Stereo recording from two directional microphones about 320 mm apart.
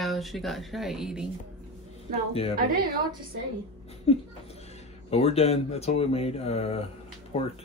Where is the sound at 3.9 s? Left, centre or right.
Centre.